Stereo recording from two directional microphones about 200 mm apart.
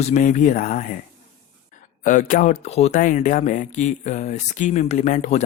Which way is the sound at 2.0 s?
40° left (ahead or behind).